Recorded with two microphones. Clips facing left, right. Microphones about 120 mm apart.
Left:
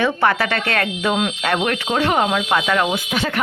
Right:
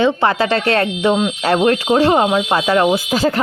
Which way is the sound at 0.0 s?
25° right (ahead or behind).